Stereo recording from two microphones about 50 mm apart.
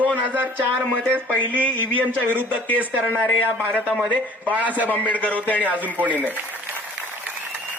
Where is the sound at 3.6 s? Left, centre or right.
Right.